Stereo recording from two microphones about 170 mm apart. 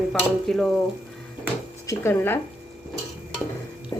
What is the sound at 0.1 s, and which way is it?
Speech, centre (ahead or behind).